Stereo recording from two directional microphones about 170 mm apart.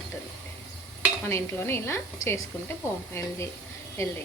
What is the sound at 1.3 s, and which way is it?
Speech, 15° left (ahead or behind).